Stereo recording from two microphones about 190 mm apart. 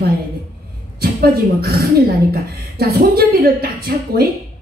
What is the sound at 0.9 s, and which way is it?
A woman's voice, 50° right (ahead or behind).